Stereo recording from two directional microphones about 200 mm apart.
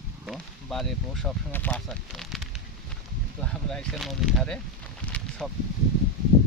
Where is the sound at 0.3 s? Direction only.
Centre (ahead or behind).